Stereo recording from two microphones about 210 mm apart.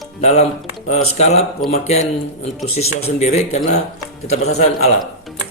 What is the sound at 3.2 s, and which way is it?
Speech, 30° left (ahead or behind).